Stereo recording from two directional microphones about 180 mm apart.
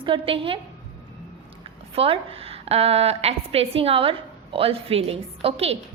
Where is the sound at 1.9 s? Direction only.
30° right (ahead or behind).